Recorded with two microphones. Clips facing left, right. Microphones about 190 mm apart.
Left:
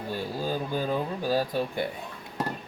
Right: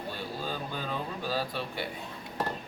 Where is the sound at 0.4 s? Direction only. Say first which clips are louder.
Left 8 dB; 45° left (ahead or behind).